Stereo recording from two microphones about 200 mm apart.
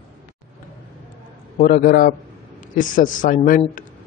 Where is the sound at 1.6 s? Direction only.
45° left (ahead or behind).